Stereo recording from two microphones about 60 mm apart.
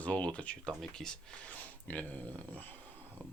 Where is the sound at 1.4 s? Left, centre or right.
Left.